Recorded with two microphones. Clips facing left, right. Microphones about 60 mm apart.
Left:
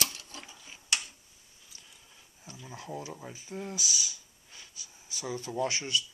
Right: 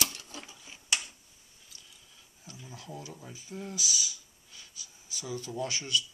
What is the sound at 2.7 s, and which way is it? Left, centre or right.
Speech, left.